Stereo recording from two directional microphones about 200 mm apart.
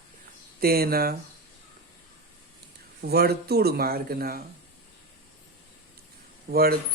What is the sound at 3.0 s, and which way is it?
Speech, 50° right (ahead or behind).